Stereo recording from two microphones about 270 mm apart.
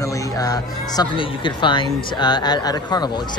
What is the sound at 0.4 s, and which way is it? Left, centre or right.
Speech, centre.